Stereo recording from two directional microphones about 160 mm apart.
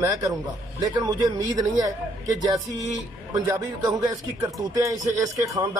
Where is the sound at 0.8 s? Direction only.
25° right (ahead or behind).